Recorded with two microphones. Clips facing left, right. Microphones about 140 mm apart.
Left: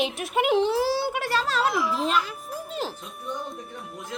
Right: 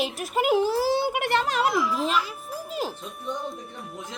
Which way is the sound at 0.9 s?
15° right (ahead or behind).